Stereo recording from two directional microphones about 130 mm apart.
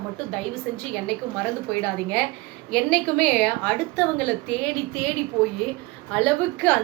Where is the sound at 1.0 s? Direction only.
10° left (ahead or behind).